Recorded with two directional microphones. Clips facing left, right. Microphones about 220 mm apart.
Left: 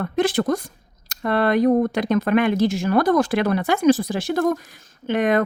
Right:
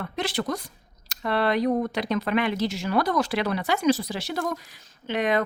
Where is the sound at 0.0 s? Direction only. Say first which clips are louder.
Left 8 dB; 50° left (ahead or behind).